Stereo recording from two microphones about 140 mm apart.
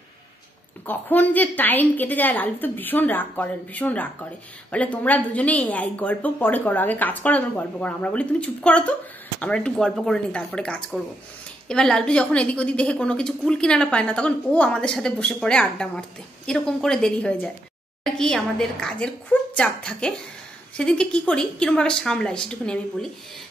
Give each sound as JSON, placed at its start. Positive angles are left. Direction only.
{"t": 0.8, "sound": "a woman's voice", "side_deg": 15}